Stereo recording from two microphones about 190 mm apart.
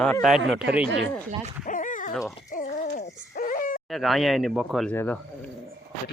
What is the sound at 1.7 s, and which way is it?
Dog, 45° left (ahead or behind).